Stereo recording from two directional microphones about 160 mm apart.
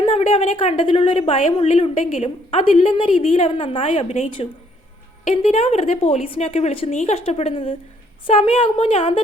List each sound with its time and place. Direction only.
0.0 s a woman's voice: 35° left (ahead or behind)
5.3 s a woman's voice: 40° left (ahead or behind)